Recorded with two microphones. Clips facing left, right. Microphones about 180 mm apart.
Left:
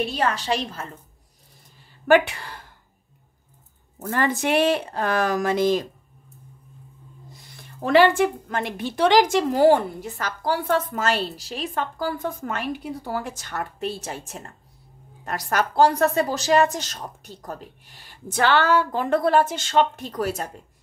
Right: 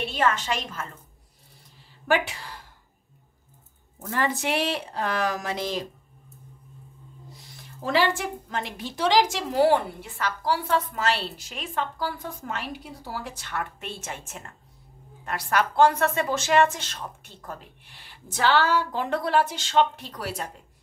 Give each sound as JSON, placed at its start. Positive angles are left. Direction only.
{"t": 0.0, "sound": "a woman's voice", "side_deg": 35}
{"t": 2.0, "sound": "a woman's voice", "side_deg": 55}
{"t": 4.0, "sound": "a woman's voice", "side_deg": 55}
{"t": 7.8, "sound": "a woman's voice", "side_deg": 55}